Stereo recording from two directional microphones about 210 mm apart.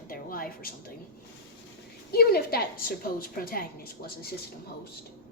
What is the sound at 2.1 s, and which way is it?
A woman's voice, 45° left (ahead or behind).